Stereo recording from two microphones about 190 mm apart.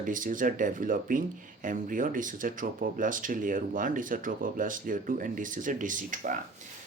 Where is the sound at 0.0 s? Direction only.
45° right (ahead or behind).